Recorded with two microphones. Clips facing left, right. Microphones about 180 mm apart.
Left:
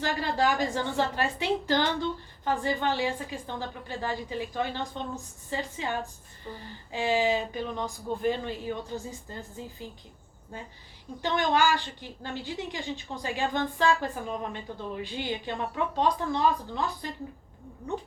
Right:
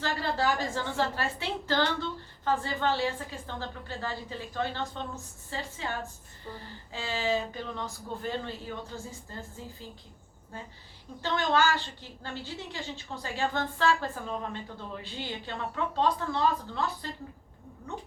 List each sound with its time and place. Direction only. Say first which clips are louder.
0.0 s a woman's voice: left 2 dB; 15° left (ahead or behind)
11.2 s a woman's voice: left 2 dB; 15° left (ahead or behind)